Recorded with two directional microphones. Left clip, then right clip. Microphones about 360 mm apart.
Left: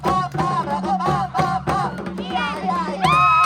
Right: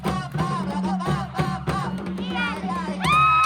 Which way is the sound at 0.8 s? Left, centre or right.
Centre.